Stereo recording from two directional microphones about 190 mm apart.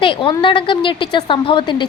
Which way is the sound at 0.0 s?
25° left (ahead or behind).